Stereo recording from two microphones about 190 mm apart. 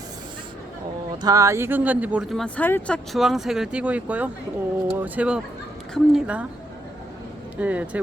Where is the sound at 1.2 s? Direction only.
20° right (ahead or behind).